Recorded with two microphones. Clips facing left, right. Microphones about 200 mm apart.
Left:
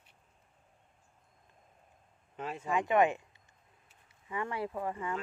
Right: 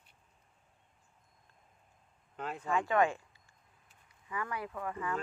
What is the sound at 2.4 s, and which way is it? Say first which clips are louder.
Speech: left 1 dB; 5° left (ahead or behind).